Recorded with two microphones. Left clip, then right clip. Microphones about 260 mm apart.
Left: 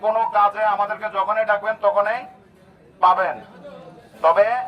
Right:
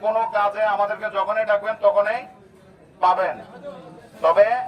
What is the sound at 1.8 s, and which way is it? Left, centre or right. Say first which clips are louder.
A man's voice: even; centre.